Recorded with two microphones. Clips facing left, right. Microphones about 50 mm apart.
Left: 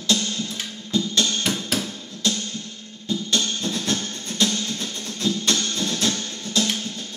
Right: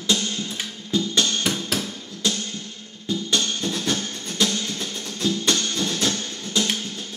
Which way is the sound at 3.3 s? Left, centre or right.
Right.